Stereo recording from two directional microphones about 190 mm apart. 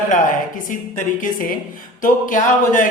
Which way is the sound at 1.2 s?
45° left (ahead or behind).